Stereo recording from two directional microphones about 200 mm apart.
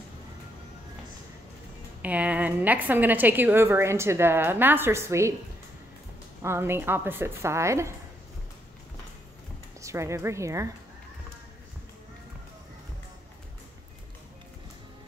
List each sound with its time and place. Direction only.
2.0 s a woman's voice: 5° right (ahead or behind)
6.4 s a woman's voice: 10° right (ahead or behind)
9.8 s a woman's voice: 15° right (ahead or behind)